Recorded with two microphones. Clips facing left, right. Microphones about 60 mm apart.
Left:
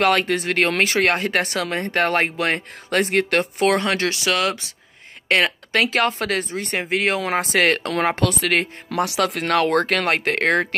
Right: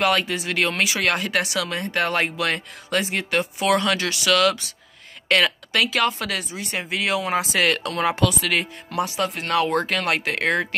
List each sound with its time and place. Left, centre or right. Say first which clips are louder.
0.0 s speech: left 3 dB; left
3.0 s speech: left 5 dB; left
3.6 s speech: left 1 dB; left
9.0 s speech: left 4 dB; left